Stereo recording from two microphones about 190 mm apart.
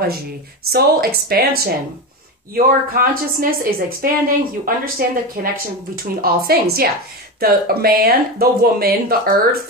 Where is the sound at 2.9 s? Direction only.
50° right (ahead or behind).